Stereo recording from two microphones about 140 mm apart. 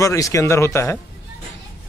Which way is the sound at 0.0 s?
20° left (ahead or behind).